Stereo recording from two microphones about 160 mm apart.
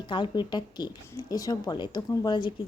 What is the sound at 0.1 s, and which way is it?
Speech, 30° left (ahead or behind).